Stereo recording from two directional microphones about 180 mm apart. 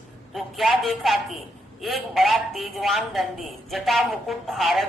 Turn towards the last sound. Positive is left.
turn(degrees=0)  # may be behind; listen again after turning